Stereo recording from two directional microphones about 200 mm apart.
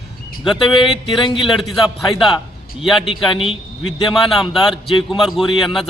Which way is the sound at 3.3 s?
25° left (ahead or behind).